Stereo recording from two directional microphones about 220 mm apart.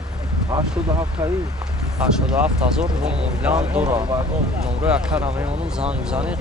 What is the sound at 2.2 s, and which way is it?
Speech, 5° right (ahead or behind).